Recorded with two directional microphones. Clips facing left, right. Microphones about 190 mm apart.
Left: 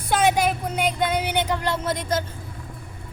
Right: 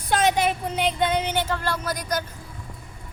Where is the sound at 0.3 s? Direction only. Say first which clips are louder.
Left 1 dB; centre (ahead or behind); by 2.2 s 25° left (ahead or behind).